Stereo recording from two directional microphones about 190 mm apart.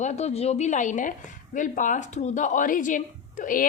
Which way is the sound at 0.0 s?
35° left (ahead or behind).